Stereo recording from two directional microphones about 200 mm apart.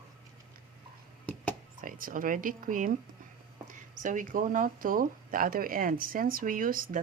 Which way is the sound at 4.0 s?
40° right (ahead or behind).